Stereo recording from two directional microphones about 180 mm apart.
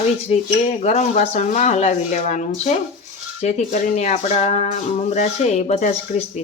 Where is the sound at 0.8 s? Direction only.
40° left (ahead or behind).